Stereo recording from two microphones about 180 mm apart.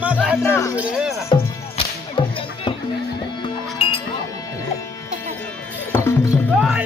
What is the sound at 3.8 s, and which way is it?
Music, 35° left (ahead or behind).